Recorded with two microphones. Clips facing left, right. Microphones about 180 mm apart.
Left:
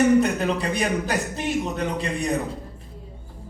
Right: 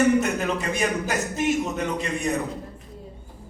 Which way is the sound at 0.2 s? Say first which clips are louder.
Left 3 dB; 35° left (ahead or behind).